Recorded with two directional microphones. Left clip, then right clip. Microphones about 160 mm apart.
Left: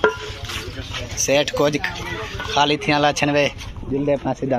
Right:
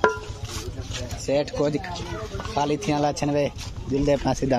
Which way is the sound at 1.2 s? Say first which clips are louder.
Left 6 dB; centre (ahead or behind).